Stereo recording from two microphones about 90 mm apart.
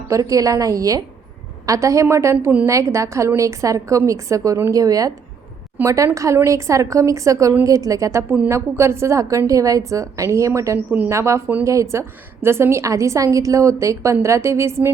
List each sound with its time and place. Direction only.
0.1 s a woman's voice: 40° right (ahead or behind)
10.8 s a woman's voice: 20° right (ahead or behind)
11.1 s a woman's voice: 30° right (ahead or behind)